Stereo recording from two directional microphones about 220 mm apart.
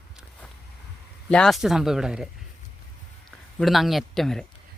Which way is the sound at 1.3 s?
Centre (ahead or behind).